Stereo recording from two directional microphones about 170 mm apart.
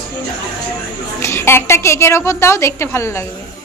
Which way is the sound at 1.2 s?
15° left (ahead or behind).